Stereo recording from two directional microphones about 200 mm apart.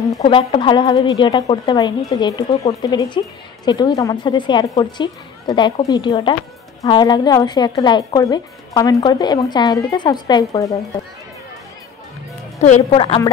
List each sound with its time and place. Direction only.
0.2 s a woman's voice: 25° left (ahead or behind)
12.5 s a woman's voice: 35° left (ahead or behind)